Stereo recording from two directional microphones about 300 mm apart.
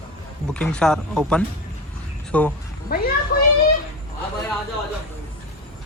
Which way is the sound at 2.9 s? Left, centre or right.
Left.